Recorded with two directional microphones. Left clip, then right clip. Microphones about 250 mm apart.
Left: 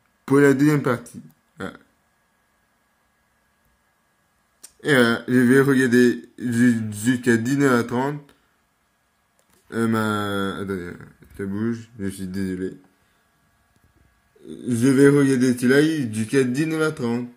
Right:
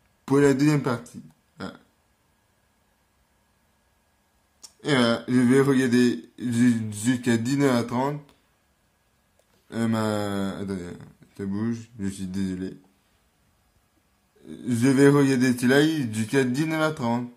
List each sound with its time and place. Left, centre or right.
0.2 s a man's voice: centre
4.6 s a man's voice: centre
9.7 s speech: centre
14.6 s a man's voice: centre